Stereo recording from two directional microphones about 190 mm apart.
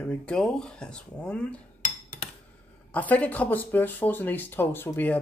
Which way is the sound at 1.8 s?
40° left (ahead or behind).